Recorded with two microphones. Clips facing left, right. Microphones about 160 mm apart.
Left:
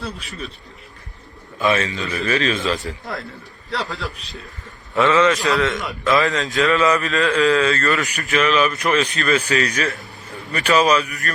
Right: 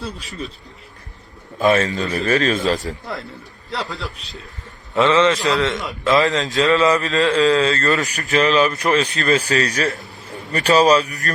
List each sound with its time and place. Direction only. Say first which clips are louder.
1.5 s speech: right 3 dB; 40° right (ahead or behind)
3.8 s a man's voice: left 1 dB; centre (ahead or behind)
4.9 s a man's voice: right 1 dB; 20° right (ahead or behind)
8.0 s speech: right 2 dB; 40° right (ahead or behind)